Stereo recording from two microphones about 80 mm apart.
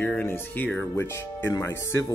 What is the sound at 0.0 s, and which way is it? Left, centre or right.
Speech, left.